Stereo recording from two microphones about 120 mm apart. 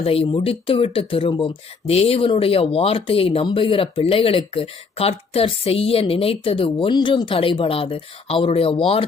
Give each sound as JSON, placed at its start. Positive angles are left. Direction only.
{"t": 0.0, "sound": "speech", "side_deg": 55}